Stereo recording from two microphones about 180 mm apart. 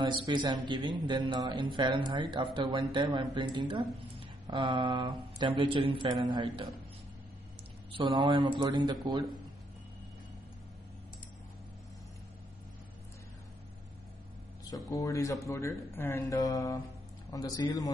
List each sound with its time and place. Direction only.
0.0 s a man's voice: 25° right (ahead or behind)
7.9 s a man's voice: 25° right (ahead or behind)
14.9 s a man's voice: 15° left (ahead or behind)